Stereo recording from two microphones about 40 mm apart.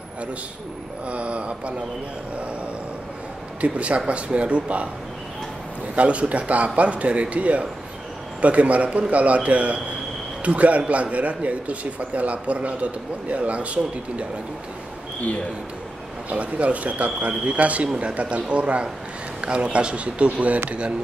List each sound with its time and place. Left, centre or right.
1.0 s a man's voice: right
3.6 s a man's voice: right
5.9 s a man's voice: right
16.3 s a man's voice: right